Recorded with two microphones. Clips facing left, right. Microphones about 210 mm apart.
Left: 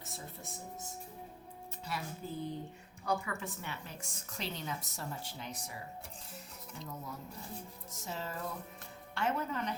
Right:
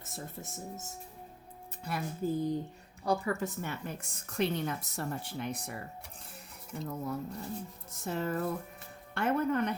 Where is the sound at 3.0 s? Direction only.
35° right (ahead or behind); by 5.8 s 60° right (ahead or behind).